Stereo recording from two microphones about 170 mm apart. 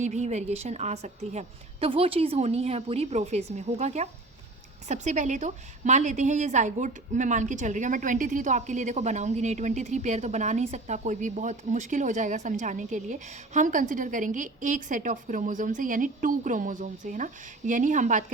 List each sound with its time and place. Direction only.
0.0 s a woman's voice: 45° right (ahead or behind)